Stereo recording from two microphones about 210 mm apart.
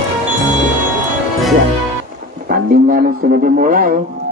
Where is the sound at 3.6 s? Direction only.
40° right (ahead or behind).